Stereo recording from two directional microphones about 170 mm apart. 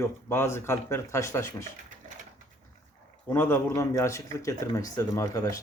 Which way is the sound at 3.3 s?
15° left (ahead or behind).